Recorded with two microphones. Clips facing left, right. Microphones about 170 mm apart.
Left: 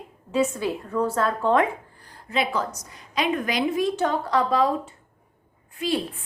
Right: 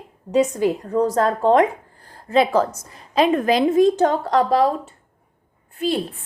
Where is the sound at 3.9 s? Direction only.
45° right (ahead or behind).